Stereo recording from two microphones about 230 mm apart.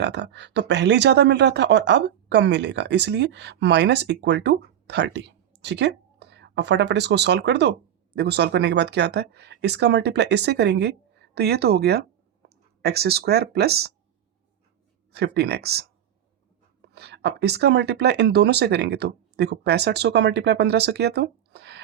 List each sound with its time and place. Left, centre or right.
0.0 s speech: right
15.1 s speech: right
16.8 s speech: right